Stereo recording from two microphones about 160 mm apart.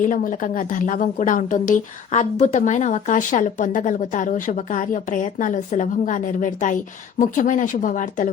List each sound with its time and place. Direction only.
0.0 s a woman's voice: 55° left (ahead or behind)